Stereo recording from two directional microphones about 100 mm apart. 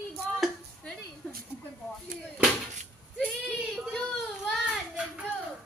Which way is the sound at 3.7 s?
5° left (ahead or behind).